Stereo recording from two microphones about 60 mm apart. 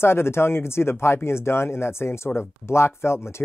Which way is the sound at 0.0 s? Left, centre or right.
Left.